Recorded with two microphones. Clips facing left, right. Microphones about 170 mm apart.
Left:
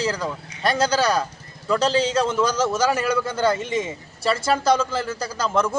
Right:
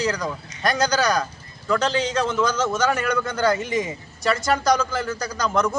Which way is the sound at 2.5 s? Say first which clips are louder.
Left 1 dB; 10° left (ahead or behind).